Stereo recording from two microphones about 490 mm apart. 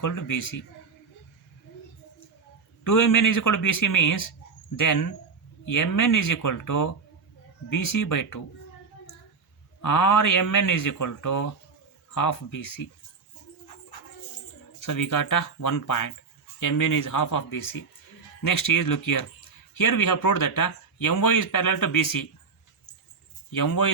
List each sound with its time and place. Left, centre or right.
0.0 s speech: left
2.8 s speech: left
9.8 s speech: left
14.8 s speech: left
23.6 s speech: left